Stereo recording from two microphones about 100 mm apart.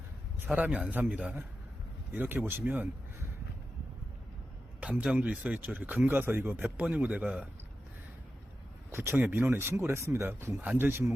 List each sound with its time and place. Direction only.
0.4 s speech: 15° right (ahead or behind)
4.8 s speech: 10° right (ahead or behind)
8.9 s speech: 20° right (ahead or behind)